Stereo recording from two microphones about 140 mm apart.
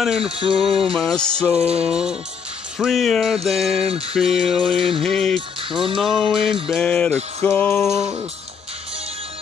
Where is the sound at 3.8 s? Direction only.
45° right (ahead or behind).